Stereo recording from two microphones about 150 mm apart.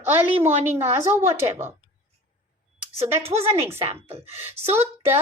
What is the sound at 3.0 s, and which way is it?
Speech, 15° right (ahead or behind).